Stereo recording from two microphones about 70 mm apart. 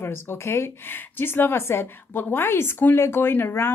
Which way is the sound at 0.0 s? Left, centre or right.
Left.